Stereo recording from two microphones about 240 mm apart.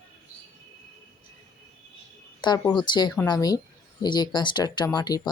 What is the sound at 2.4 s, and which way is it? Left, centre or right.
Speech, centre.